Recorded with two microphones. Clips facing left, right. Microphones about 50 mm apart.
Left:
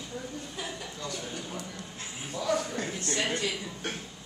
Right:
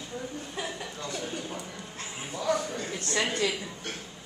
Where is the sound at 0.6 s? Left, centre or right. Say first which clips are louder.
Right 4 dB; centre.